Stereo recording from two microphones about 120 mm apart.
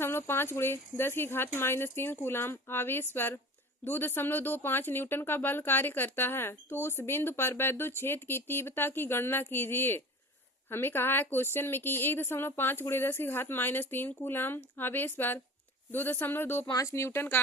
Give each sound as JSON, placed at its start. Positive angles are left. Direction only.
{"t": 0.0, "sound": "speech", "side_deg": 20}